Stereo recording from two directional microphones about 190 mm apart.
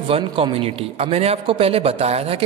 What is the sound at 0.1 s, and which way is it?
A man's voice, 30° right (ahead or behind).